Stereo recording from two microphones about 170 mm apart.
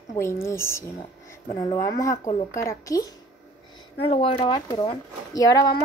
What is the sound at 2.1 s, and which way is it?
Speech, 50° left (ahead or behind).